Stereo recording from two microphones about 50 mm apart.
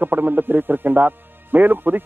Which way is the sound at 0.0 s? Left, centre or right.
Right.